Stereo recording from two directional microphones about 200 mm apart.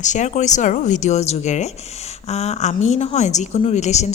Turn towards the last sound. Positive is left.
turn(degrees=35)  # may be behind; listen again after turning